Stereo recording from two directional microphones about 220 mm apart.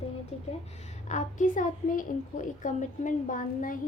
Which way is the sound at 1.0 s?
35° left (ahead or behind).